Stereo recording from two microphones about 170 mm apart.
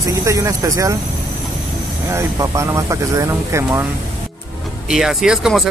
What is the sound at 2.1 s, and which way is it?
Speech, 20° right (ahead or behind).